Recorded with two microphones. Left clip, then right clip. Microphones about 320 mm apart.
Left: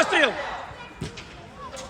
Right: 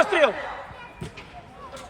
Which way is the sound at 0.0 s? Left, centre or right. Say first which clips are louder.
Right 1 dB; centre.